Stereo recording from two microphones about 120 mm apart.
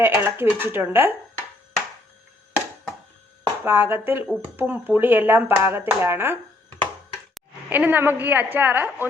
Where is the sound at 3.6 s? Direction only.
15° right (ahead or behind).